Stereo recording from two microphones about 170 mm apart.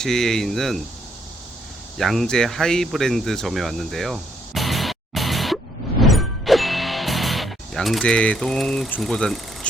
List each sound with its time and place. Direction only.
0.0 s speech: 5° left (ahead or behind)
2.0 s speech: centre (ahead or behind)
6.0 s music: centre (ahead or behind)